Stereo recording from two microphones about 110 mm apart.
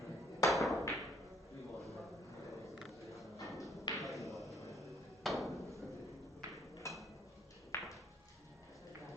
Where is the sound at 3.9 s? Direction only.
Centre (ahead or behind).